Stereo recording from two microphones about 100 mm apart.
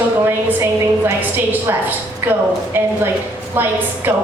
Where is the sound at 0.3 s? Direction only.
25° right (ahead or behind).